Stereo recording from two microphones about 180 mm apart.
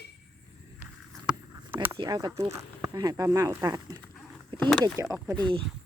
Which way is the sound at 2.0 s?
25° right (ahead or behind).